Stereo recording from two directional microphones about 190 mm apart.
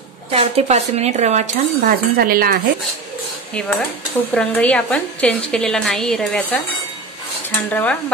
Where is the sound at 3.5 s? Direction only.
5° left (ahead or behind).